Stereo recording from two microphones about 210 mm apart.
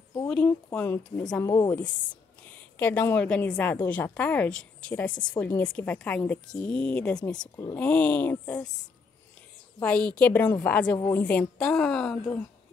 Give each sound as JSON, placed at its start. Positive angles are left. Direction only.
{"t": 0.3, "sound": "a woman's voice", "side_deg": 5}
{"t": 9.8, "sound": "a woman's voice", "side_deg": 5}